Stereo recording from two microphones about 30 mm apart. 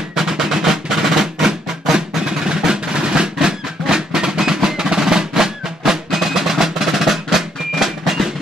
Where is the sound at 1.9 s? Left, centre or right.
Right.